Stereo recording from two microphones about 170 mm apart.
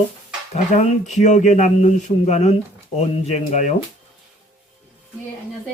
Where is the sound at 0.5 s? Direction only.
40° left (ahead or behind).